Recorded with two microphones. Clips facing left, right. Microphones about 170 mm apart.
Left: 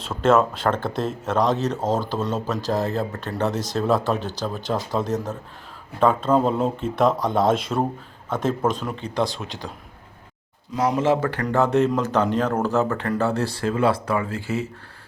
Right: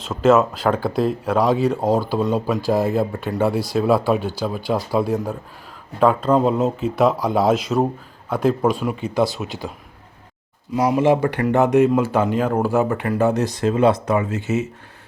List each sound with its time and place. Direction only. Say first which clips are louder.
0.0 s speech: right 3 dB; centre (ahead or behind)
2.6 s speech: right 5 dB; 15° right (ahead or behind)
10.8 s speech: right 4 dB; 10° right (ahead or behind)
11.9 s speech: right 3 dB; 5° right (ahead or behind); by 14.7 s 20° right (ahead or behind)